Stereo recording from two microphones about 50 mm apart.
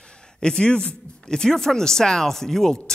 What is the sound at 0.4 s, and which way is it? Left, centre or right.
A man's voice, centre.